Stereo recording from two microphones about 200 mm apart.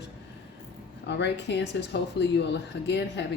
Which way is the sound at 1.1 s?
60° left (ahead or behind).